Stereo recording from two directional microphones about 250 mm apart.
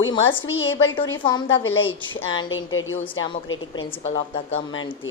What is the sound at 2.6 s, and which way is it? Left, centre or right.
Speech, left.